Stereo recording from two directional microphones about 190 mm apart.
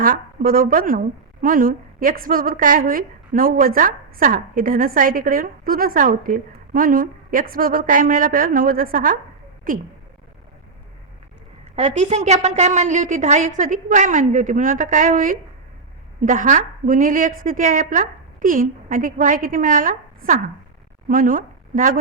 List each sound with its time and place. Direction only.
0.0 s a woman's voice: 45° right (ahead or behind)
11.8 s a woman's voice: 35° right (ahead or behind)